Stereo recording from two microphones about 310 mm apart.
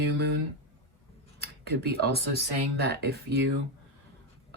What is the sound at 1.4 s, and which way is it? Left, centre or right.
Speech, right.